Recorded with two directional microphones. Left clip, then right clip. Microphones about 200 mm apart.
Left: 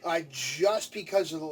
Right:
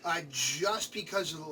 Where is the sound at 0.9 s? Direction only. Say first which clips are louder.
Left 6 dB; 15° left (ahead or behind).